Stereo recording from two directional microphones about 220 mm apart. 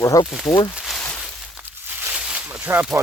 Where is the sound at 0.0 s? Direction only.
15° left (ahead or behind).